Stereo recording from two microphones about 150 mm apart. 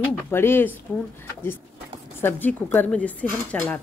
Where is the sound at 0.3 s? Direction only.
15° left (ahead or behind).